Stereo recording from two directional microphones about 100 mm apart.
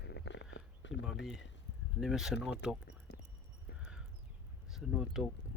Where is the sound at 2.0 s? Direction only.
5° right (ahead or behind).